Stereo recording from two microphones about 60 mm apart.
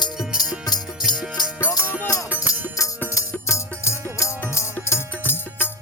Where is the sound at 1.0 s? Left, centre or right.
Centre.